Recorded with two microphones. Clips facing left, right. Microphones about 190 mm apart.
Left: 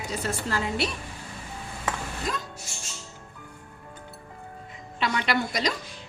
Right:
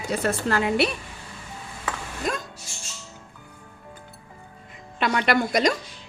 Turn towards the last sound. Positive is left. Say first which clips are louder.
# right 6 dB
turn(degrees=-55)  # may be behind; listen again after turning